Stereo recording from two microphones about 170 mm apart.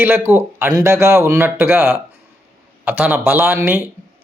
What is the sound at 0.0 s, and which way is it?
A man's voice, 10° right (ahead or behind).